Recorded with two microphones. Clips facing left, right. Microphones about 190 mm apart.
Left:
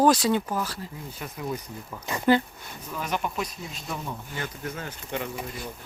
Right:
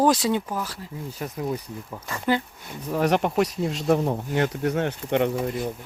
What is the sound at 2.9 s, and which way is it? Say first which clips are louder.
Speech: right 9 dB; 70° right (ahead or behind).